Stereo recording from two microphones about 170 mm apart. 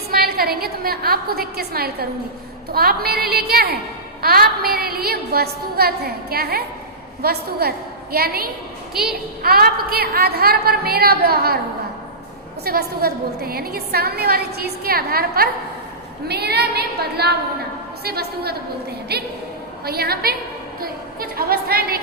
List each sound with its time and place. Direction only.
0.1 s a woman's voice: 65° right (ahead or behind)
12.6 s a woman's voice: 65° right (ahead or behind)
20.8 s a sound: 60° right (ahead or behind)